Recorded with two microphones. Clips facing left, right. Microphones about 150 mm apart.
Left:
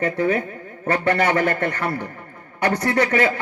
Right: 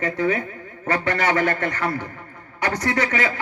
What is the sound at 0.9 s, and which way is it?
Speech, 55° left (ahead or behind).